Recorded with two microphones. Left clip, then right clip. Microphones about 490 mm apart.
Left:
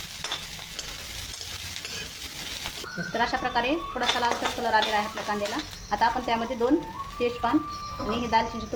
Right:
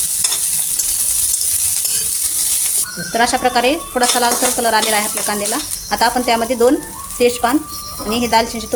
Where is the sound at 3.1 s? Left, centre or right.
Centre.